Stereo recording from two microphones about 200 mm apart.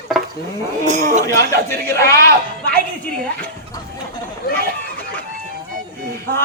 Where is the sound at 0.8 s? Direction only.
35° right (ahead or behind).